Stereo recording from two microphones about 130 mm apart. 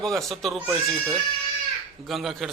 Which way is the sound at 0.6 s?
15° right (ahead or behind).